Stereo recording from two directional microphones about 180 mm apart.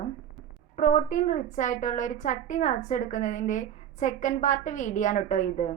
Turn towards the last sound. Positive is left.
turn(degrees=45)  # may be behind; listen again after turning